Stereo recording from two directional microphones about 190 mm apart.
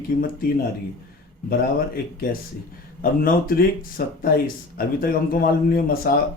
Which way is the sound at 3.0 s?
50° left (ahead or behind).